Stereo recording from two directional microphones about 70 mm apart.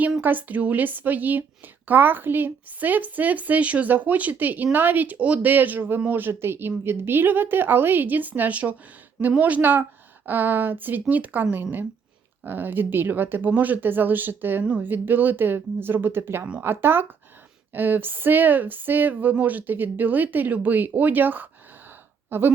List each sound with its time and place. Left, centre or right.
0.2 s a woman's voice: right